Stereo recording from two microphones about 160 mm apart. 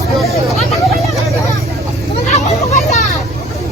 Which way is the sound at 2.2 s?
45° left (ahead or behind).